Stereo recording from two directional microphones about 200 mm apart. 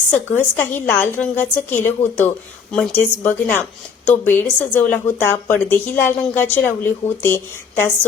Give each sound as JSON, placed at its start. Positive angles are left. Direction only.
{"t": 0.5, "sound": "a woman's voice", "side_deg": 10}